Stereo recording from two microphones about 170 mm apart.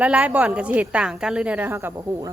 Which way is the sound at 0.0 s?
10° right (ahead or behind).